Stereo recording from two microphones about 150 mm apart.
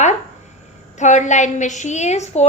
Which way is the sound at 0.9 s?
55° left (ahead or behind).